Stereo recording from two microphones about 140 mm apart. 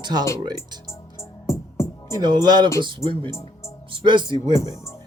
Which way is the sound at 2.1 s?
30° right (ahead or behind).